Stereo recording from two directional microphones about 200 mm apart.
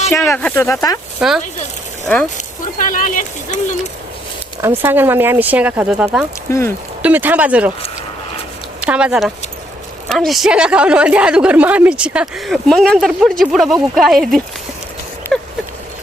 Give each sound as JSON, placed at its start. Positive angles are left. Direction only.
{"t": 0.1, "sound": "speech", "side_deg": 10}
{"t": 1.2, "sound": "a woman's voice", "side_deg": -5}
{"t": 2.7, "sound": "speech", "side_deg": 40}
{"t": 4.6, "sound": "speech", "side_deg": -10}
{"t": 6.5, "sound": "speech", "side_deg": 15}
{"t": 7.0, "sound": "speech", "side_deg": -10}
{"t": 8.8, "sound": "a woman's voice", "side_deg": -5}
{"t": 15.3, "sound": "a sound", "side_deg": 0}